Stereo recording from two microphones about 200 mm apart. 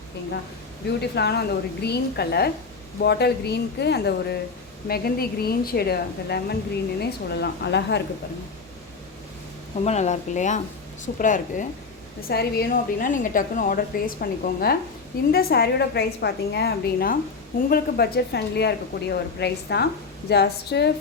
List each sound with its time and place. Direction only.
1.1 s a woman's voice: 55° left (ahead or behind)
9.8 s speech: 35° left (ahead or behind)
12.3 s a woman's voice: 50° left (ahead or behind)